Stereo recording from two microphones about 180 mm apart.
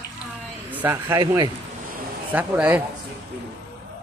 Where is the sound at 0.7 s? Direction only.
10° right (ahead or behind).